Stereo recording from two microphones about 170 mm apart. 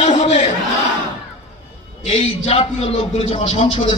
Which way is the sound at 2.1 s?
35° left (ahead or behind).